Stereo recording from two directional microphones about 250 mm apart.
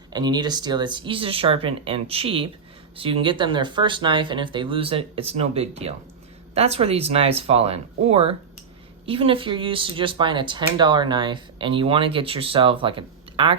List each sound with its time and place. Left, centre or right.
0.1 s speech: centre